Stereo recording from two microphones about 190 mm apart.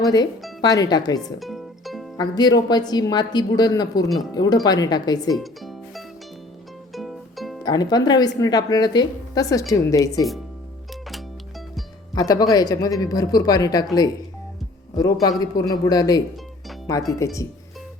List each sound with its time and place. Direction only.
0.0 s speech: 20° left (ahead or behind)
1.4 s music: centre (ahead or behind)
2.1 s speech: 20° left (ahead or behind)
5.3 s music: centre (ahead or behind)
7.6 s speech: 20° left (ahead or behind)
12.1 s speech: 20° left (ahead or behind)
14.9 s speech: 20° left (ahead or behind)